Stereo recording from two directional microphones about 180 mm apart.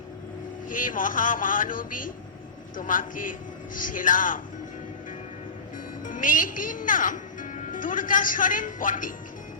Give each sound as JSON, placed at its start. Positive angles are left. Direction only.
{"t": 0.7, "sound": "speech", "side_deg": 50}
{"t": 6.1, "sound": "a woman's voice", "side_deg": 50}